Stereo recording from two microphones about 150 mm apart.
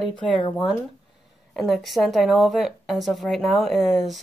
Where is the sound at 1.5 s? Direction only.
5° left (ahead or behind).